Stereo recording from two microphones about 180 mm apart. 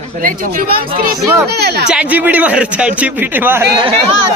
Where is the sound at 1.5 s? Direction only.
65° right (ahead or behind).